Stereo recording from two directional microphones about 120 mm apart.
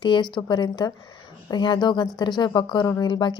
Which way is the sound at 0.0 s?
40° left (ahead or behind).